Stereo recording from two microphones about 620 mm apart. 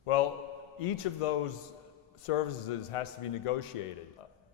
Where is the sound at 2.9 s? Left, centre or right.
Left.